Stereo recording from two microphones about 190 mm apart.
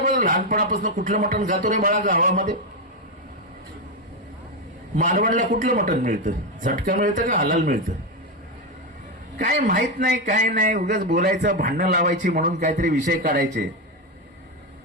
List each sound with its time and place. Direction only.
0.0 s a man's voice: 45° right (ahead or behind)
4.9 s a man's voice: 45° right (ahead or behind)
9.4 s a man's voice: 45° right (ahead or behind)